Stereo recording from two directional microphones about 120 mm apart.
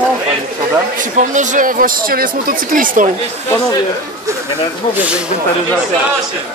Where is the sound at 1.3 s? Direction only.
90° right.